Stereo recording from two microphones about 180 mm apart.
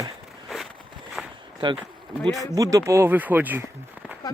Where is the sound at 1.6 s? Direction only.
25° right (ahead or behind).